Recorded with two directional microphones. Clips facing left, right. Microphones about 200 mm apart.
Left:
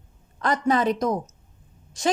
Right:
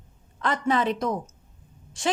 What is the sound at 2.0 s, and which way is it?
Speech, 40° left (ahead or behind).